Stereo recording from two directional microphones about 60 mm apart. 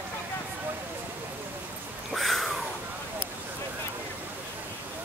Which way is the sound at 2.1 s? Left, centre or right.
Centre.